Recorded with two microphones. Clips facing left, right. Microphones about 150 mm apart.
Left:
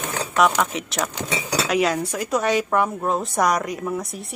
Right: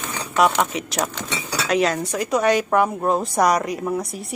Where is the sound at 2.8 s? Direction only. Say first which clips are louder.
Right 3 dB; 10° right (ahead or behind).